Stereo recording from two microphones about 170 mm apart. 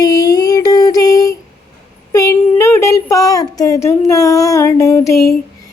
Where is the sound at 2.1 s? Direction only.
15° left (ahead or behind).